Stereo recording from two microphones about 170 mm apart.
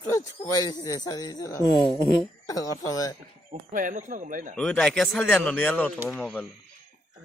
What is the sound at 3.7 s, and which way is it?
Speech, 50° right (ahead or behind).